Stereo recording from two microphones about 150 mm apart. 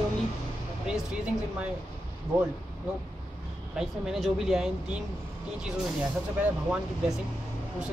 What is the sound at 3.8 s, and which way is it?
Speech, 5° right (ahead or behind).